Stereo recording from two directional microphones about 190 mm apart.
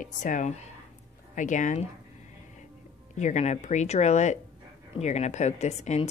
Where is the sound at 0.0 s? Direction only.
45° left (ahead or behind).